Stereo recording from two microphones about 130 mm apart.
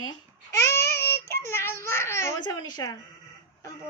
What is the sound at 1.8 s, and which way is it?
Speech, 20° left (ahead or behind).